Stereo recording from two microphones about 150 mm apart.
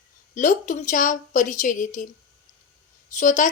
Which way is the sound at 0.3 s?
55° left (ahead or behind).